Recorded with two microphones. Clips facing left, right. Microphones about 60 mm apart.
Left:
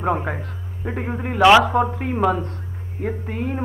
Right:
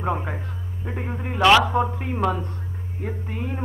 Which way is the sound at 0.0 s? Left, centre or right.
Centre.